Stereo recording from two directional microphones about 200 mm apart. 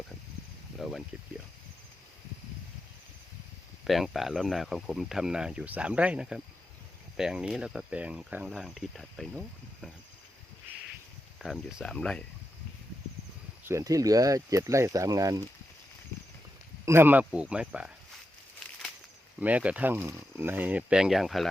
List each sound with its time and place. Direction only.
0.8 s speech: centre (ahead or behind)
3.8 s speech: centre (ahead or behind)
11.3 s speech: centre (ahead or behind)
13.7 s speech: 15° right (ahead or behind)
16.8 s speech: 10° right (ahead or behind)
19.4 s speech: 5° right (ahead or behind)